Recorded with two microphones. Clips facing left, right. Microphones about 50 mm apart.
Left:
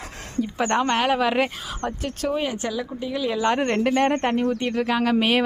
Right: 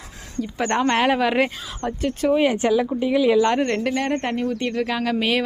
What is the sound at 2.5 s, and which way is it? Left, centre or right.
Speech, right.